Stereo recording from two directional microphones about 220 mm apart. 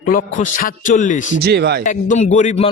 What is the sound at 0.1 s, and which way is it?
A man's voice, 35° left (ahead or behind).